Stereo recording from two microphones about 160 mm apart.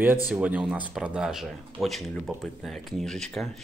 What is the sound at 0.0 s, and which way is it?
Speech, 10° right (ahead or behind).